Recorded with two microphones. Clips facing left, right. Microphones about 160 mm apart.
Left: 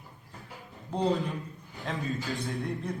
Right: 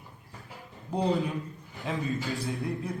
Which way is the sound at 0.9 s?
10° right (ahead or behind).